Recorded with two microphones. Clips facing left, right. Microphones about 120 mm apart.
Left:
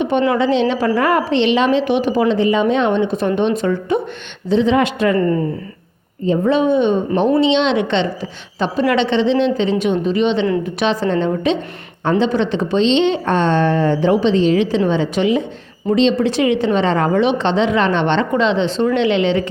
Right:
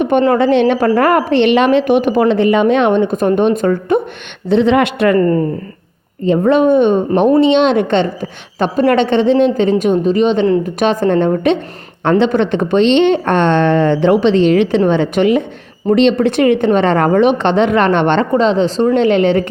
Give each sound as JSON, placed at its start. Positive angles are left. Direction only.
{"t": 0.0, "sound": "a woman's voice", "side_deg": -50}
{"t": 4.4, "sound": "a woman's voice", "side_deg": -65}
{"t": 5.1, "sound": "speech", "side_deg": -45}
{"t": 6.2, "sound": "speech", "side_deg": -65}
{"t": 12.0, "sound": "a woman's voice", "side_deg": -65}
{"t": 18.3, "sound": "a woman's voice", "side_deg": -40}